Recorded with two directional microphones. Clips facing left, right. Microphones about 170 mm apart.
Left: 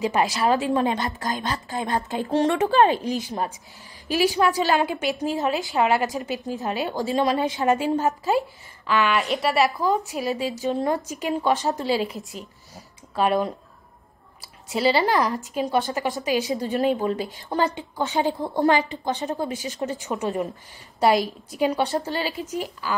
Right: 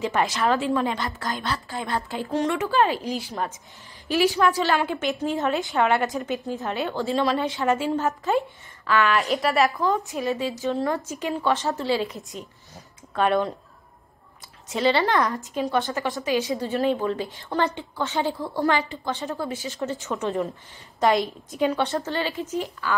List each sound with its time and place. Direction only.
0.0 s a woman's voice: 15° left (ahead or behind)
5.3 s a woman's voice: centre (ahead or behind)
8.1 s a woman's voice: 5° left (ahead or behind)
10.1 s a woman's voice: 15° left (ahead or behind)
12.4 s a sound: 5° left (ahead or behind)
14.8 s a woman's voice: 10° left (ahead or behind)